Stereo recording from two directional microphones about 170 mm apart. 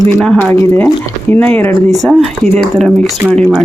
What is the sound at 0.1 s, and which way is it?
Speech, 5° left (ahead or behind).